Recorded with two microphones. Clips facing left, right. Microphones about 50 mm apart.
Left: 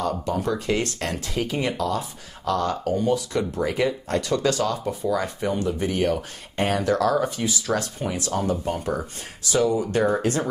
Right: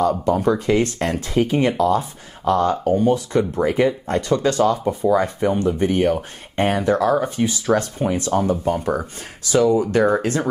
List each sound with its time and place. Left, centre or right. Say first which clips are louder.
0.0 s speech: right 7 dB; right
8.7 s speech: right 5 dB; right
9.5 s speech: right 5 dB; right